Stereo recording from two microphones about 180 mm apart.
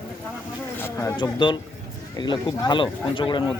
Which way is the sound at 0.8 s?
15° left (ahead or behind).